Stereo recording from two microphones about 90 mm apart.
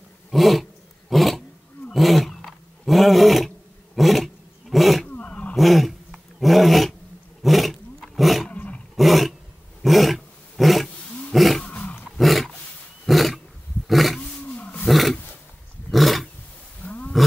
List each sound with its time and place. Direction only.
0.3 s a sound: centre (ahead or behind)
1.1 s roar: centre (ahead or behind)
5.1 s roaring cats: 15° left (ahead or behind)
5.6 s roar: centre (ahead or behind)
8.5 s roar: 15° left (ahead or behind)
8.9 s roar: centre (ahead or behind)
10.9 s roar: 15° left (ahead or behind)
11.3 s roar: centre (ahead or behind)
11.6 s roar: 15° left (ahead or behind)
12.2 s roar: centre (ahead or behind)
13.8 s roaring cats: centre (ahead or behind)
14.2 s roar: 15° left (ahead or behind)
14.9 s roar: centre (ahead or behind)
16.8 s roaring cats: 15° left (ahead or behind)